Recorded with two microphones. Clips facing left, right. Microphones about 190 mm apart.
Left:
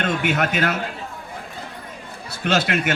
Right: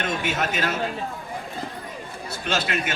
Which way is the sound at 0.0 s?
65° left (ahead or behind).